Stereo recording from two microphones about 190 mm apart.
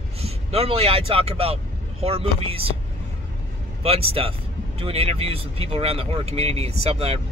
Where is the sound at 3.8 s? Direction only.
30° right (ahead or behind).